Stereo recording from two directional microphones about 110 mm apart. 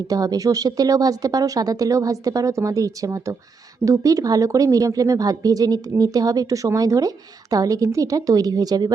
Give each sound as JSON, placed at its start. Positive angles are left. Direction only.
{"t": 0.1, "sound": "speech", "side_deg": -35}